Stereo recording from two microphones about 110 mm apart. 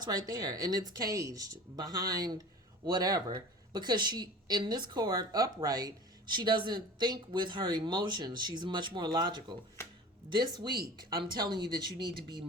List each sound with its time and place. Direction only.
0.0 s speech: 35° right (ahead or behind)